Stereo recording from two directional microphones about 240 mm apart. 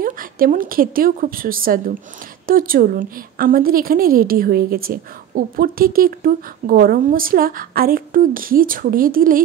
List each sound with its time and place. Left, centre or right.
0.0 s a woman's voice: right